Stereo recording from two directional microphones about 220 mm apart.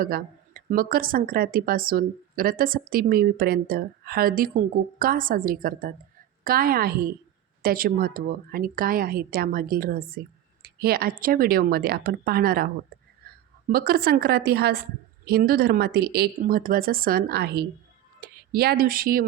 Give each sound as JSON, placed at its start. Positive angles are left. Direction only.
{"t": 0.0, "sound": "a woman's voice", "side_deg": -40}
{"t": 13.2, "sound": "a sound", "side_deg": -45}
{"t": 13.7, "sound": "a woman's voice", "side_deg": -45}